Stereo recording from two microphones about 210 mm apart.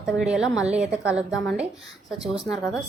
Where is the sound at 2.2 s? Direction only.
5° right (ahead or behind).